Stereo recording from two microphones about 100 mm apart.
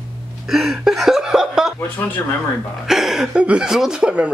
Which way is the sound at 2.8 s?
5° right (ahead or behind).